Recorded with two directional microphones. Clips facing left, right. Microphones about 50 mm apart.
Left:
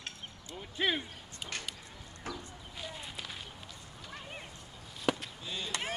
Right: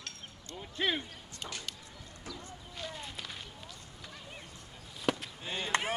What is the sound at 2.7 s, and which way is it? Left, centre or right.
Walk, centre.